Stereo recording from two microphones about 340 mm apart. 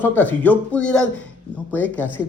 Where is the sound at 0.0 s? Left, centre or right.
Centre.